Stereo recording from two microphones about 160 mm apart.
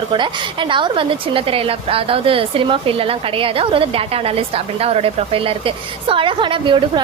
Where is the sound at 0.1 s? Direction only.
30° right (ahead or behind).